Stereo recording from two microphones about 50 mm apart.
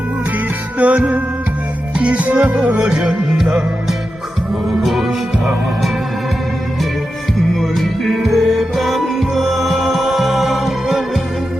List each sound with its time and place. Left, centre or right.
0.8 s music: right
2.7 s music: right
3.1 s music: centre
4.8 s music: centre
7.6 s music: centre